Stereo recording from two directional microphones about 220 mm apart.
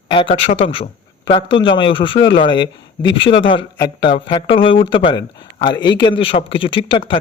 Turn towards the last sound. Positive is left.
turn(degrees=25)  # may be behind; listen again after turning